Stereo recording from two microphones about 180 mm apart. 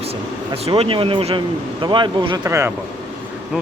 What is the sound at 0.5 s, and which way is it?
Speech, 35° right (ahead or behind).